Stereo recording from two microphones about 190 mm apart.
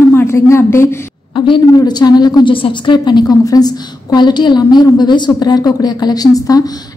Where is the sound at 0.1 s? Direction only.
15° left (ahead or behind).